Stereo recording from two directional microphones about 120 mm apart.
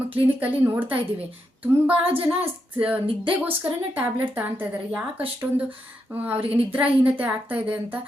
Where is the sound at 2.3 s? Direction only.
15° right (ahead or behind).